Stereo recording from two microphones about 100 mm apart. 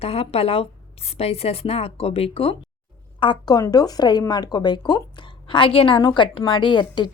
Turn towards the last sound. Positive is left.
turn(degrees=50)  # may be behind; listen again after turning